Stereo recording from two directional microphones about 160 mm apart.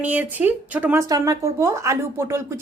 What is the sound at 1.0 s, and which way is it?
Speech, 20° right (ahead or behind).